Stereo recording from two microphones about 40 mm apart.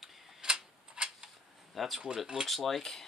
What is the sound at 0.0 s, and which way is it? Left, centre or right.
Tick-tock, centre.